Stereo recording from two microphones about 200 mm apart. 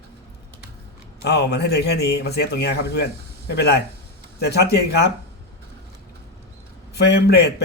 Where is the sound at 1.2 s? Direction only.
55° left (ahead or behind).